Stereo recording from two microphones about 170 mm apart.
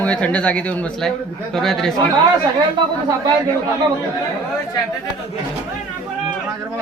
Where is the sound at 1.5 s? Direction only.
Centre (ahead or behind).